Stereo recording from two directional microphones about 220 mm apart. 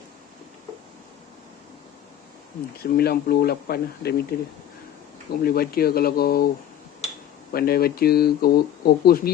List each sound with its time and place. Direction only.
2.8 s speech: 45° left (ahead or behind)
7.5 s speech: 45° left (ahead or behind)